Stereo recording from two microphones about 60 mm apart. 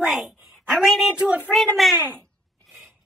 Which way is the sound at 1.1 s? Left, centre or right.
Right.